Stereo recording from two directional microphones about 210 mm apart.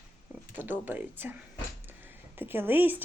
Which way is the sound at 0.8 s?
10° right (ahead or behind).